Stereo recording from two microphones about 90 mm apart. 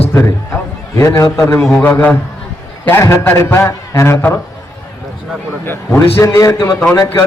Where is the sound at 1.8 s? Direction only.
20° left (ahead or behind).